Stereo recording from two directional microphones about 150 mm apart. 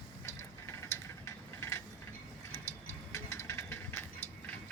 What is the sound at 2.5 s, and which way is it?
Ratchet, 15° left (ahead or behind).